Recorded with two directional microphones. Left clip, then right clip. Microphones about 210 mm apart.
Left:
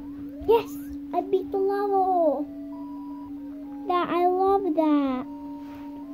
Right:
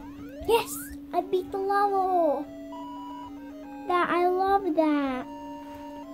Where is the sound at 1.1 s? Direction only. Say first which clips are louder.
Left 2 dB; 25° left (ahead or behind).